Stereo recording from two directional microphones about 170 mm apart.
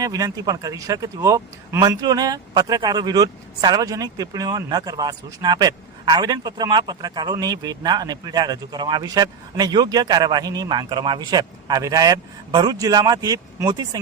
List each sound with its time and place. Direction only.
0.0 s speech: 20° right (ahead or behind)